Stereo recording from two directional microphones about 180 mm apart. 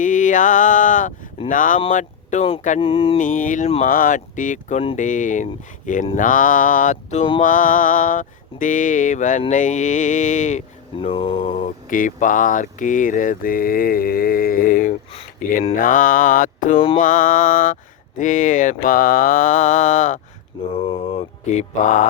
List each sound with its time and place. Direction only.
0.0 s a sound: 45° left (ahead or behind)
1.5 s speech: 45° left (ahead or behind); by 3.2 s 30° left (ahead or behind)
3.2 s speech: 45° left (ahead or behind)
3.8 s speech: 50° left (ahead or behind)
10.9 s mantra: 30° left (ahead or behind)
11.6 s speech: 45° left (ahead or behind)
21.4 s speech: 40° left (ahead or behind)